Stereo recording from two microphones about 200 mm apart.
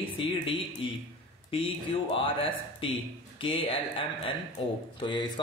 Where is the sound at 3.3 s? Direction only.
25° left (ahead or behind).